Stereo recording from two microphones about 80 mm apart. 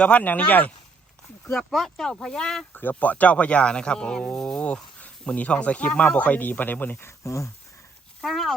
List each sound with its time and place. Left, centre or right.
0.0 s speech: centre
1.5 s speech: centre
2.9 s speech: centre
7.1 s speech: left
8.2 s speech: centre